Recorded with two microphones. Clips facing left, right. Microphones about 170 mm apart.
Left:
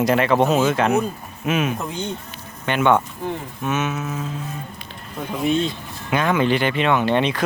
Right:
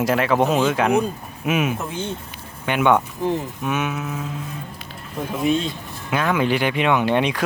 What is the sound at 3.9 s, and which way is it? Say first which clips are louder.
Speech: left 1 dB; centre (ahead or behind).